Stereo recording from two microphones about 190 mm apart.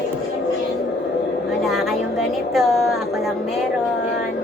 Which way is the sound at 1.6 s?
Centre (ahead or behind).